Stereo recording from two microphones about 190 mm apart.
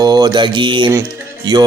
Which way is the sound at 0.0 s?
20° right (ahead or behind).